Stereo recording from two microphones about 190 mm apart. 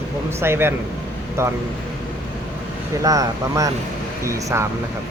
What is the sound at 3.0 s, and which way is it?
Speech, 15° right (ahead or behind).